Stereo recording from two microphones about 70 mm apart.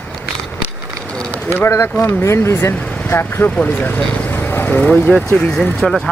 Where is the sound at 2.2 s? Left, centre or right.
Left.